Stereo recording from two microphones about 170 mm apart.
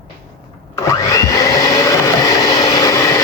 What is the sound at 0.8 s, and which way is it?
Blender, 20° left (ahead or behind).